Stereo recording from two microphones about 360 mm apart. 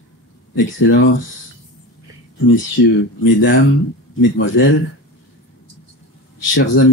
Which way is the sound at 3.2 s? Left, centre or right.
Left.